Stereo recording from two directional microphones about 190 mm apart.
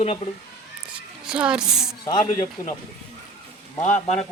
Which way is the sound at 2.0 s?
20° left (ahead or behind).